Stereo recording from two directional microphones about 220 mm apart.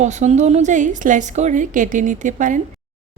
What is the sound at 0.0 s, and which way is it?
A woman's voice, 30° right (ahead or behind).